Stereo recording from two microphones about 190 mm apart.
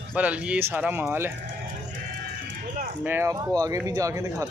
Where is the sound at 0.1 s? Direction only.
5° right (ahead or behind).